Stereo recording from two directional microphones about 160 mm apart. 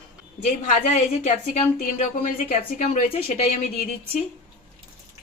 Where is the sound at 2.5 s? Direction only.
45° left (ahead or behind).